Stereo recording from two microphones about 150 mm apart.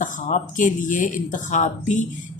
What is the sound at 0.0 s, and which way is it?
Speech, 60° left (ahead or behind).